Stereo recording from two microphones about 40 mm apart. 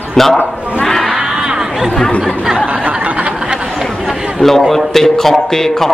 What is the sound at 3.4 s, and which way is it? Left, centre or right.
Chatter, right.